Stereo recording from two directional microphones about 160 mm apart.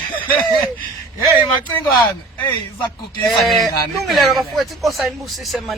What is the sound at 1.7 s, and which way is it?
Speech, 10° left (ahead or behind).